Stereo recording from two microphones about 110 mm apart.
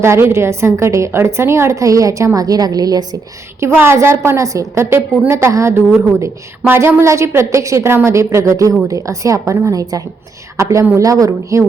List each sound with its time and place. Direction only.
0.0 s a woman's voice: 25° right (ahead or behind)
3.6 s a woman's voice: 20° right (ahead or behind)